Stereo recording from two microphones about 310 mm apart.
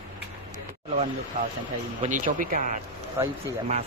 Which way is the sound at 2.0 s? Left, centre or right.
Right.